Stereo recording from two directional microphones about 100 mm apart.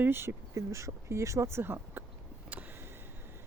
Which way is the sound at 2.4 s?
15° right (ahead or behind).